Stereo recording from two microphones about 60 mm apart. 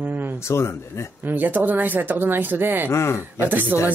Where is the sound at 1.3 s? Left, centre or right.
Right.